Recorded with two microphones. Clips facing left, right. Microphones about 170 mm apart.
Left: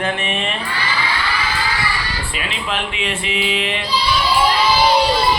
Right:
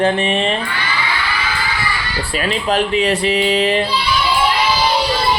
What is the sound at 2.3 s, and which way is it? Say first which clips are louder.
Speech: right 9 dB; 40° right (ahead or behind).